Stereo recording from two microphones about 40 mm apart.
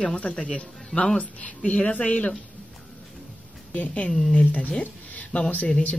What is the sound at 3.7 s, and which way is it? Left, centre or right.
Speech, left.